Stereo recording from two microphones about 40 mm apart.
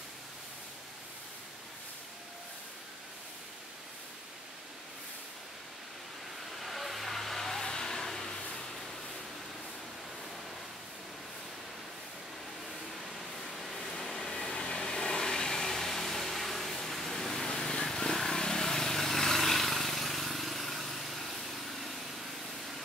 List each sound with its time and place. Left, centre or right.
6.6 s vehicle: centre
13.0 s a sound: centre
14.0 s vehicle: centre
14.3 s vehicle: left; by 21.9 s centre